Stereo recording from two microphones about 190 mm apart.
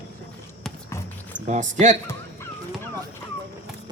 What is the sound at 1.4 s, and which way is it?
Speech, 40° right (ahead or behind).